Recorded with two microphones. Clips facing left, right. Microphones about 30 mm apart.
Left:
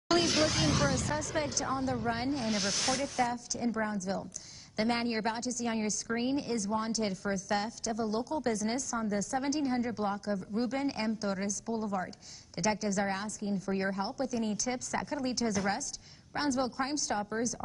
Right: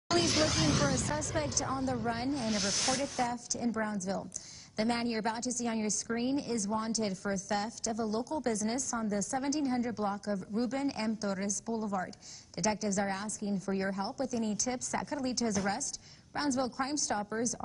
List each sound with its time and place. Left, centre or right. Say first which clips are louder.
0.1 s a sound: left 1 dB; centre
1.3 s a woman's voice: left 1 dB; left
3.6 s a woman's voice: left 1 dB; centre
5.4 s a woman's voice: even; centre
6.1 s a woman's voice: left 1 dB; left